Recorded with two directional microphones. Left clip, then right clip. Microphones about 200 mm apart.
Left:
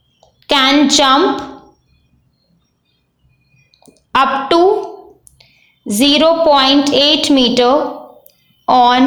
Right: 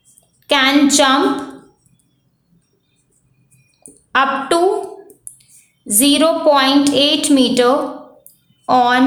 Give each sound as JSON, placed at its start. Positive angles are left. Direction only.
{"t": 0.3, "sound": "a woman's voice", "side_deg": 15}
{"t": 3.9, "sound": "a woman's voice", "side_deg": 15}
{"t": 5.8, "sound": "a woman's voice", "side_deg": 10}